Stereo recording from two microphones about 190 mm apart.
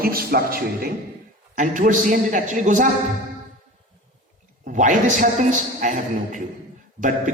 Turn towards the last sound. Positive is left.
turn(degrees=-40)  # may be behind; listen again after turning